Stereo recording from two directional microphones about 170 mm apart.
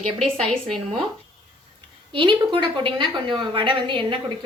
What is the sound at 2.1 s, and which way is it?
A woman's voice, 30° right (ahead or behind).